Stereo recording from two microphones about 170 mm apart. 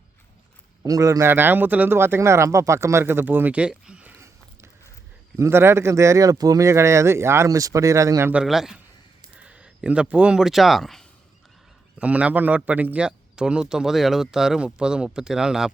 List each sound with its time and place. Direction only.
0.8 s speech: 20° right (ahead or behind)
5.4 s a man's voice: 15° right (ahead or behind)